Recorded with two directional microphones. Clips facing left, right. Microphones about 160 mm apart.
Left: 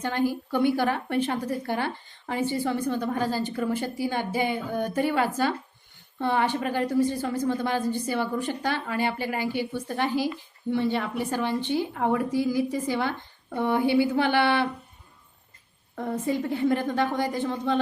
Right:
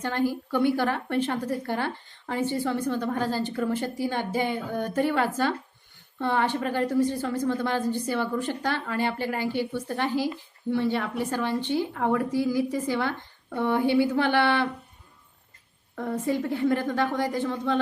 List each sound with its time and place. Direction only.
0.0 s a woman's voice: 15° left (ahead or behind)
16.0 s a woman's voice: 25° left (ahead or behind)